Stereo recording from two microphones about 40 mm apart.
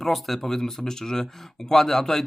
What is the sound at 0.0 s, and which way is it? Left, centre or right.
Speech, centre.